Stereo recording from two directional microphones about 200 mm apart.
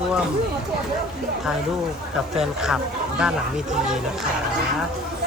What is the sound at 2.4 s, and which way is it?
Speech, 5° right (ahead or behind).